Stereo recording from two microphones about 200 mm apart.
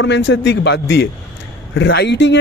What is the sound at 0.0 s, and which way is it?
Speech, 65° left (ahead or behind).